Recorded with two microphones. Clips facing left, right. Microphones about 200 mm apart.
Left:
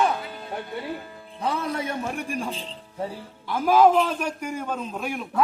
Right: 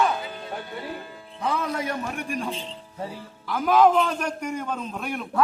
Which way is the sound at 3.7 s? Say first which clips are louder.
Left 1 dB; 5° left (ahead or behind).